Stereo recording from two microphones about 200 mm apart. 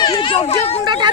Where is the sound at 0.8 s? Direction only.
20° right (ahead or behind).